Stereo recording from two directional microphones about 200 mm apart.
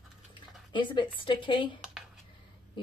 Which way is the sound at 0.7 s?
25° left (ahead or behind).